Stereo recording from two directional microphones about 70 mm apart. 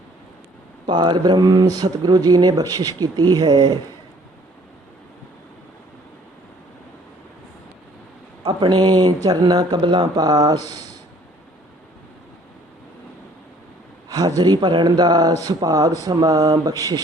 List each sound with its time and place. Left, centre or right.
0.9 s speech: right
8.4 s speech: right
14.1 s speech: right